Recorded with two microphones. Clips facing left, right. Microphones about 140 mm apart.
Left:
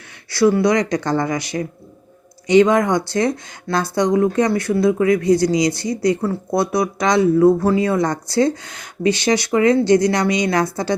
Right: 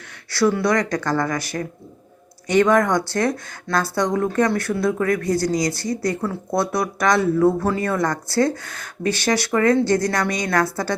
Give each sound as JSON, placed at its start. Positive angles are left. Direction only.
{"t": 0.1, "sound": "speech", "side_deg": 15}